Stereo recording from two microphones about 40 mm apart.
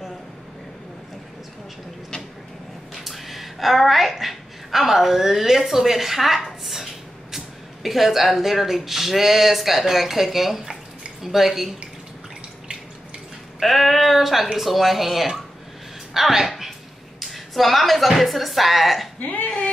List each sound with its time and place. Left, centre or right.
2.9 s a woman's voice: centre
13.6 s speech: centre
17.2 s speech: centre
19.1 s speech: left